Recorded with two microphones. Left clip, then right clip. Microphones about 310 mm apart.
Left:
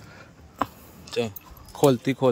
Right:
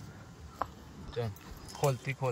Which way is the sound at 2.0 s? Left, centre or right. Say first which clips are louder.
Left 13 dB; left.